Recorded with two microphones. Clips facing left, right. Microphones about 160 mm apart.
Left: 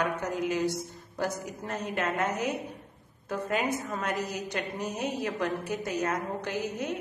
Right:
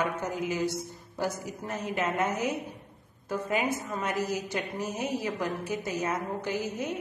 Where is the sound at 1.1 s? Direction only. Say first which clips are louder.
Even; centre (ahead or behind).